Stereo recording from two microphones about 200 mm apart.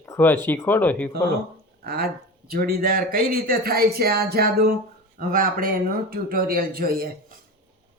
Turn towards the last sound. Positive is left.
turn(degrees=-45)  # may be behind; listen again after turning